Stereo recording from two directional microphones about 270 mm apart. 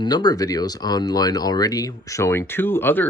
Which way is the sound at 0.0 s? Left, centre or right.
Centre.